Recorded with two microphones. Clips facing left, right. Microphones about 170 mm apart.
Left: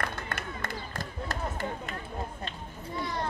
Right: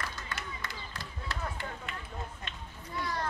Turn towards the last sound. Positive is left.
turn(degrees=20)  # may be behind; listen again after turning